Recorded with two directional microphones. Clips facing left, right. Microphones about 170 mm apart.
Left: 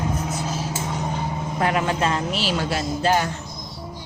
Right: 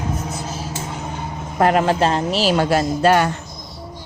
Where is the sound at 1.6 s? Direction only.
45° right (ahead or behind).